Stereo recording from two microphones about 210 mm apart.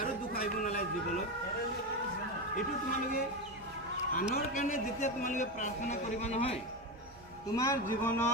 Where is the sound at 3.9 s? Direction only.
35° left (ahead or behind).